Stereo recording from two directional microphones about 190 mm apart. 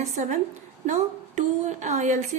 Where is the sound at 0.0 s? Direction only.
35° right (ahead or behind).